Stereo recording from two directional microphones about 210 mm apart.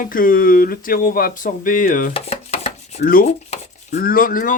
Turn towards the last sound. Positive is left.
turn(degrees=40)  # may be behind; listen again after turning